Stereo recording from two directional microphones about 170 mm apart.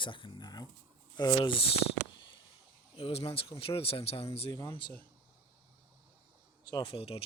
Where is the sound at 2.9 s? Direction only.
35° left (ahead or behind).